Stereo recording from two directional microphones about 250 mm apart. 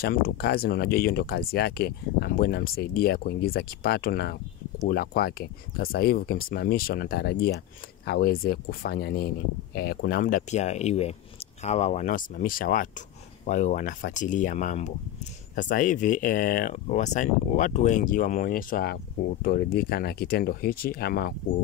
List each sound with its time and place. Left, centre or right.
0.0 s speech: left